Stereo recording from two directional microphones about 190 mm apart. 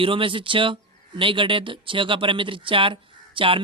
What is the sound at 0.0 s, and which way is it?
A man's voice, 30° right (ahead or behind).